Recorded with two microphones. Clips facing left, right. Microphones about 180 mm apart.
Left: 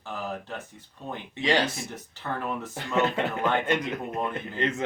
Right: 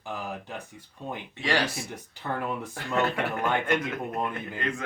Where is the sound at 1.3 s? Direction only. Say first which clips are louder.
Left 3 dB; 20° left (ahead or behind).